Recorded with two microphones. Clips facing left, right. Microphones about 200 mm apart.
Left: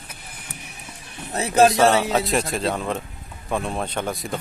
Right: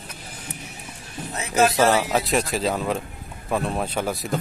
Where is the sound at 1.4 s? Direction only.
35° left (ahead or behind).